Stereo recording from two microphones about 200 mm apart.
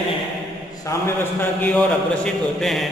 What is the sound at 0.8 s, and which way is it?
A man's voice, 10° left (ahead or behind).